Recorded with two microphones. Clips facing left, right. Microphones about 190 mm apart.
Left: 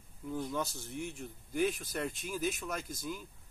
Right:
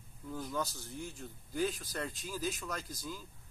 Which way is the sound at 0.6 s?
25° left (ahead or behind).